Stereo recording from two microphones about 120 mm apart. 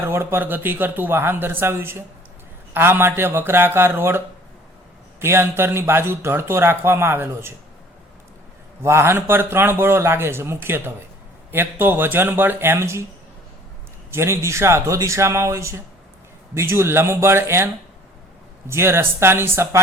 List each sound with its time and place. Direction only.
0.0 s speech: 20° right (ahead or behind)
5.2 s speech: 20° right (ahead or behind)
8.8 s speech: 20° right (ahead or behind)
14.1 s speech: 20° right (ahead or behind)
18.7 s speech: 20° right (ahead or behind)